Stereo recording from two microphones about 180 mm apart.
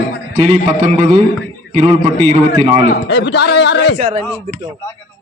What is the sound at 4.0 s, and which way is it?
Speech, 40° right (ahead or behind).